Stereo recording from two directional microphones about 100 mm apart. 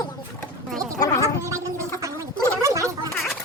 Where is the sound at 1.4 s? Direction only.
30° right (ahead or behind).